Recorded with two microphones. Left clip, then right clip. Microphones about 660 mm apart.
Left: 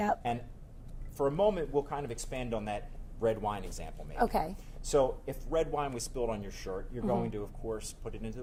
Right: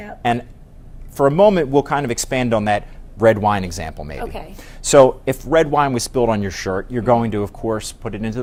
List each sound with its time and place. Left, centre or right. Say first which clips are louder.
1.1 s speech: right 16 dB; right